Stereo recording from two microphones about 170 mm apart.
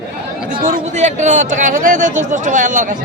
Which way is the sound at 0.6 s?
45° right (ahead or behind).